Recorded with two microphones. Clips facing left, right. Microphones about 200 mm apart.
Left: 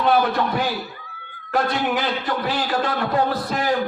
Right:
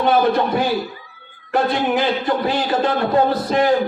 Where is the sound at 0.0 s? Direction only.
25° right (ahead or behind).